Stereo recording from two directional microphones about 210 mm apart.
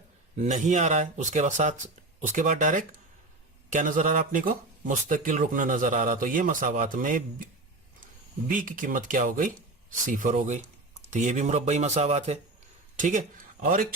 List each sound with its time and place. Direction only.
0.3 s speech: 35° right (ahead or behind)
8.4 s speech: 40° right (ahead or behind)